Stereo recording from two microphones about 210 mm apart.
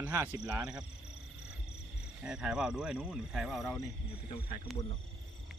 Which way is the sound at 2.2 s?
5° right (ahead or behind).